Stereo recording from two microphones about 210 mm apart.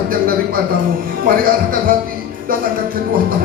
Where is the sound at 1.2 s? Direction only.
45° right (ahead or behind).